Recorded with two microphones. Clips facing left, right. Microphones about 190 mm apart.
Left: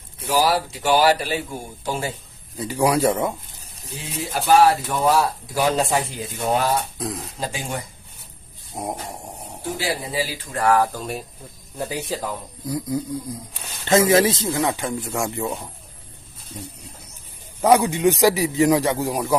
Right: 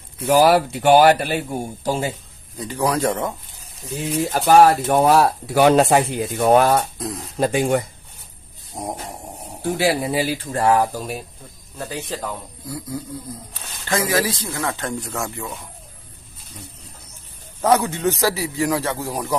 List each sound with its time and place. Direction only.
0.3 s speech: 60° right (ahead or behind)
2.6 s a man's voice: 10° left (ahead or behind)
3.9 s speech: 45° right (ahead or behind)
5.0 s speech: 65° right (ahead or behind)
7.0 s speech: centre (ahead or behind)
7.3 s speech: 60° right (ahead or behind)
8.7 s a sound: centre (ahead or behind)
9.7 s speech: 60° right (ahead or behind)
10.5 s speech: 30° right (ahead or behind)
10.8 s speech: 10° right (ahead or behind)
11.8 s a man's voice: 10° left (ahead or behind)
12.6 s speech: 20° left (ahead or behind)
14.8 s a man's voice: 5° left (ahead or behind); by 15.5 s 20° left (ahead or behind)
17.6 s a man's voice: 10° left (ahead or behind)